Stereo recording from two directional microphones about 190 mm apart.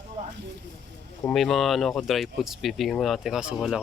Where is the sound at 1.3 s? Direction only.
Centre (ahead or behind).